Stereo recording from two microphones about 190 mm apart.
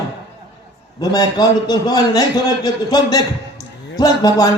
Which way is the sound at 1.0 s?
20° left (ahead or behind).